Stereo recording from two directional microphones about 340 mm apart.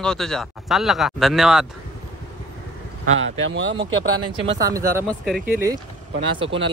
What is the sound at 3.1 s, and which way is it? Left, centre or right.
Speech, right.